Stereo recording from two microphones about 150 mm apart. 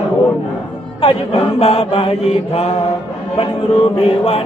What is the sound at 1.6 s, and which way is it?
Speech, 40° left (ahead or behind).